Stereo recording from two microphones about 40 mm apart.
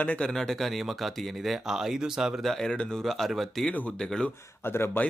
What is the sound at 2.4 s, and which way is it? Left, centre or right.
Speech, centre.